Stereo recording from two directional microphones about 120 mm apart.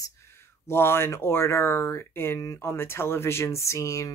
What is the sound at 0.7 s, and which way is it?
Speech, 20° left (ahead or behind).